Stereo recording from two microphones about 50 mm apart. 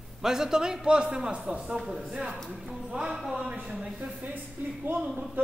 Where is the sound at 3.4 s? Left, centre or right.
Right.